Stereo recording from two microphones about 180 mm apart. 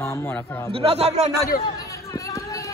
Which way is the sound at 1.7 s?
20° left (ahead or behind).